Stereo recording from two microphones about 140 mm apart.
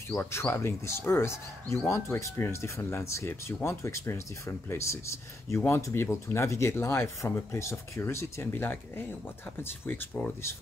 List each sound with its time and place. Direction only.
0.2 s speech: 15° left (ahead or behind)